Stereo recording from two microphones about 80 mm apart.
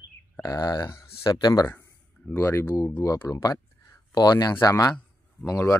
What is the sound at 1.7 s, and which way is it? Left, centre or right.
Speech, left.